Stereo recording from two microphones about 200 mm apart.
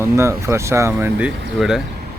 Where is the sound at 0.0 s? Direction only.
15° right (ahead or behind).